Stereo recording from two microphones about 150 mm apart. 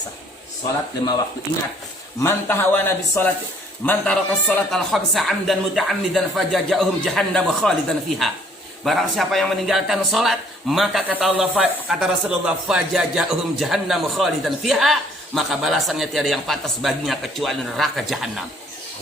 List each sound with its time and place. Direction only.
2.2 s a man's voice: 15° left (ahead or behind); by 18.4 s centre (ahead or behind)